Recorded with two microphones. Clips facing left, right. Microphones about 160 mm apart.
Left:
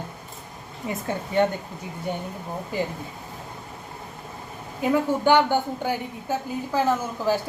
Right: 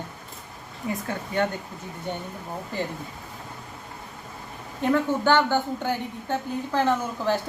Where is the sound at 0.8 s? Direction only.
20° left (ahead or behind).